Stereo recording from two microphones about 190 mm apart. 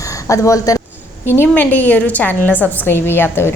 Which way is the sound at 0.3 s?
15° left (ahead or behind).